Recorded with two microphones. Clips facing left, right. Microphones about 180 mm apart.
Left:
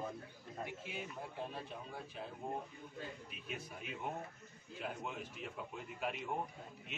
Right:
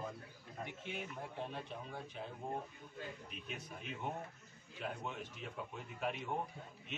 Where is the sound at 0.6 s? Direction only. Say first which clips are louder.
Even; 5° left (ahead or behind).